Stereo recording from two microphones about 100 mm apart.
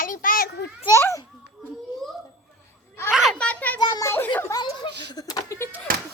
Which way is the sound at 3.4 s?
15° left (ahead or behind).